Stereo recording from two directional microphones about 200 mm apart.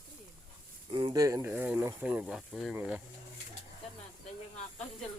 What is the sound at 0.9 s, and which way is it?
Speech, 25° right (ahead or behind).